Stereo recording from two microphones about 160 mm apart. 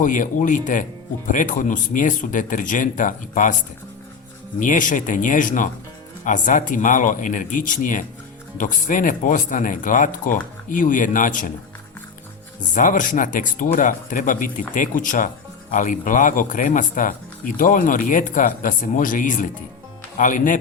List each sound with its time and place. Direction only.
0.0 s speech: 55° left (ahead or behind)
4.6 s speech: 55° left (ahead or behind)
12.5 s speech: 55° left (ahead or behind)